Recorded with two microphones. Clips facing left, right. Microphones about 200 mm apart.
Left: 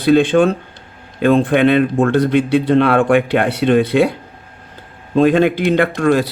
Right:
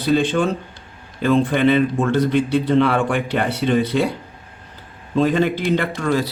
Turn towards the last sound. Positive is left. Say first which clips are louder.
# left 6 dB
turn(degrees=65)  # may be behind; listen again after turning